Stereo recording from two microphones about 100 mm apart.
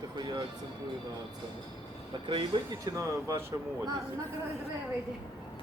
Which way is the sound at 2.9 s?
30° right (ahead or behind).